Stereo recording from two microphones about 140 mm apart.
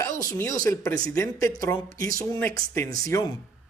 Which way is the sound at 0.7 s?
15° left (ahead or behind).